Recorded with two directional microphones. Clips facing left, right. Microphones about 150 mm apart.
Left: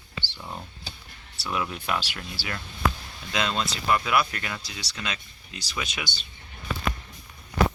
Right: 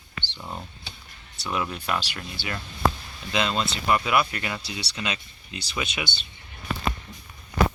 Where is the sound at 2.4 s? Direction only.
20° right (ahead or behind).